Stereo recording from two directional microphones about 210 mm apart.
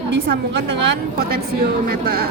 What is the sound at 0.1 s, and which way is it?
Speech, 60° right (ahead or behind).